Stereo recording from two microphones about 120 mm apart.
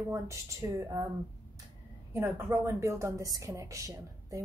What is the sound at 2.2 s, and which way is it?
A woman's voice, 20° right (ahead or behind).